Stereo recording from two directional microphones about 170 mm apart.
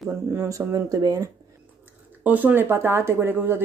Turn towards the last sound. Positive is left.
turn(degrees=-10)  # may be behind; listen again after turning